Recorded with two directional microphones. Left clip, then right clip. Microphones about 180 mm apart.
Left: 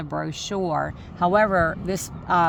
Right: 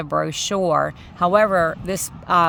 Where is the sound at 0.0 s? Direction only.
40° right (ahead or behind).